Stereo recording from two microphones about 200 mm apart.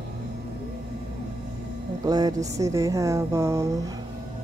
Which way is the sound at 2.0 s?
20° right (ahead or behind).